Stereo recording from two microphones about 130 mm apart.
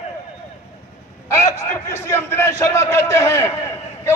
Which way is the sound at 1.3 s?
25° left (ahead or behind).